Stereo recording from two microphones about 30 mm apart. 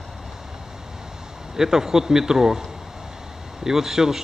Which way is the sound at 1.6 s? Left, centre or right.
Centre.